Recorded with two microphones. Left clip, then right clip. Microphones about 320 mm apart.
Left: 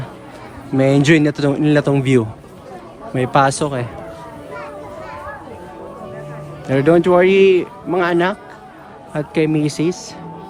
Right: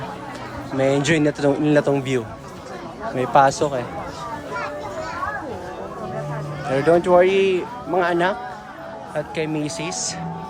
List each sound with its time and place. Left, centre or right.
0.8 s a man's voice: left
6.7 s a man's voice: left